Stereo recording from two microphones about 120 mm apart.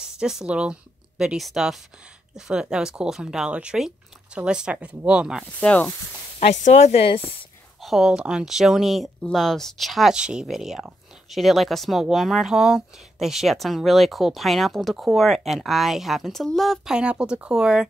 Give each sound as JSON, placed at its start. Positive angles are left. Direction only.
{"t": 0.0, "sound": "speech", "side_deg": -5}
{"t": 5.6, "sound": "speech", "side_deg": 10}
{"t": 6.4, "sound": "speech", "side_deg": 70}
{"t": 7.8, "sound": "speech", "side_deg": -5}